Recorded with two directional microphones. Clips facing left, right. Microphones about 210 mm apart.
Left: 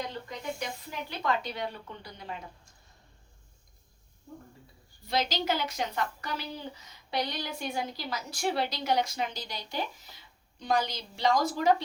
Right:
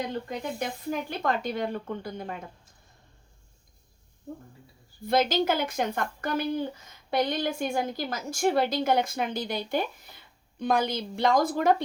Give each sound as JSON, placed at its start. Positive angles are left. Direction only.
{"t": 0.3, "sound": "speech", "side_deg": -50}
{"t": 5.0, "sound": "speech", "side_deg": -50}